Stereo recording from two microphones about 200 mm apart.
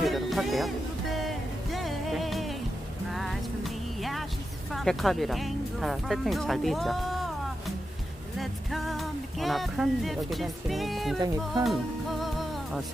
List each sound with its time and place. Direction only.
0.0 s music: centre (ahead or behind)
4.7 s speech: centre (ahead or behind)
8.4 s speech: centre (ahead or behind)
11.6 s music: centre (ahead or behind)